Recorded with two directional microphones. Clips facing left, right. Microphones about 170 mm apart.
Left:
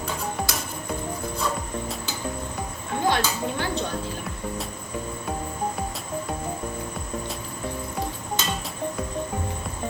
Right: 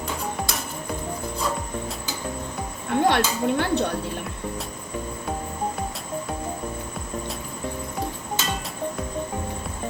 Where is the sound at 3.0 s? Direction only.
65° right (ahead or behind).